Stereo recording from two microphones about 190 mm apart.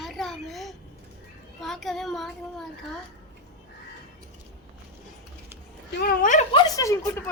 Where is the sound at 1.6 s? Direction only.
Centre (ahead or behind).